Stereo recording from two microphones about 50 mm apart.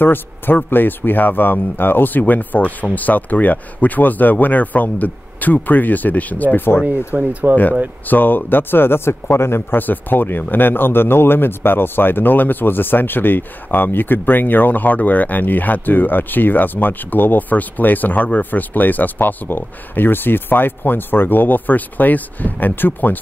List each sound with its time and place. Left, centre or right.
0.0 s speech: left
7.1 s speech: right
8.1 s speech: left
9.8 s speech: left